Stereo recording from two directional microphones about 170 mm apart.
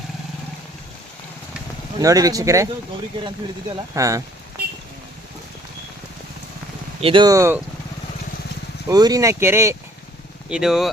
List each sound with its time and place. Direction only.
2.0 s speech: 20° right (ahead or behind)
3.9 s speech: 20° right (ahead or behind)
7.0 s speech: 30° right (ahead or behind)
8.9 s speech: 20° right (ahead or behind)
10.5 s speech: 5° right (ahead or behind)